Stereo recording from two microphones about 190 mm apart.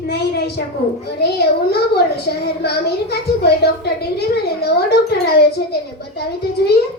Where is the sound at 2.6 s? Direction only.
55° left (ahead or behind).